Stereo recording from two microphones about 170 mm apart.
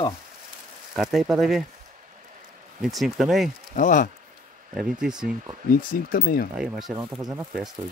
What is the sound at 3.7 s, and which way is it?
Speech, 50° left (ahead or behind).